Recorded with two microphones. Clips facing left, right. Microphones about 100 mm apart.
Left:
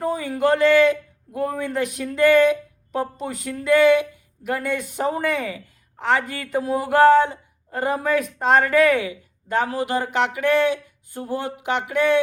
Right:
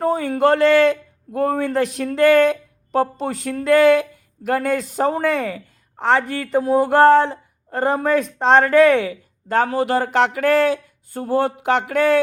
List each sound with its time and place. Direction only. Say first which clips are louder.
0.0 s a man's voice: right 4 dB; 30° right (ahead or behind)